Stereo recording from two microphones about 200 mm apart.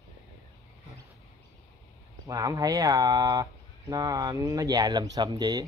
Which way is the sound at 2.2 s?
15° right (ahead or behind).